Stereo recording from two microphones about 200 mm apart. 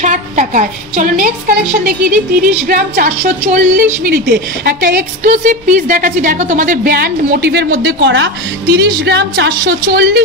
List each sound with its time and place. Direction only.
0.0 s a woman's voice: 40° right (ahead or behind)
2.0 s speech: 10° right (ahead or behind)
2.6 s a woman's voice: 45° right (ahead or behind)
4.0 s a woman's voice: 50° right (ahead or behind)